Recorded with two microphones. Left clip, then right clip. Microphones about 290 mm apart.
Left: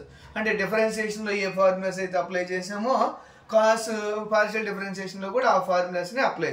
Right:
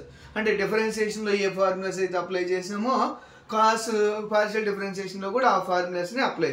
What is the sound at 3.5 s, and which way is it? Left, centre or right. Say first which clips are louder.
Speech: left 2 dB; centre.